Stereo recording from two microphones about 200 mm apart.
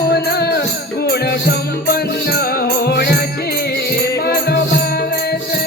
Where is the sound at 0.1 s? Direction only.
55° left (ahead or behind).